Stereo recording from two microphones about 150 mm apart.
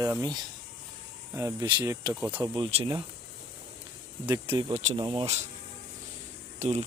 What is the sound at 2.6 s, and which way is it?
Speech, 35° right (ahead or behind).